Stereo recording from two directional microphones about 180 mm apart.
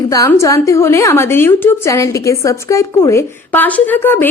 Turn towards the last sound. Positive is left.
turn(degrees=10)  # may be behind; listen again after turning